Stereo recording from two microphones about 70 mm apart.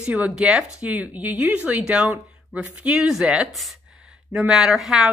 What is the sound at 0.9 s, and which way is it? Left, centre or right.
A woman's voice, right.